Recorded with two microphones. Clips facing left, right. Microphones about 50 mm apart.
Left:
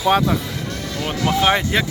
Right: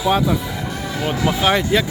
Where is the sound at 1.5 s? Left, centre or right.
Left.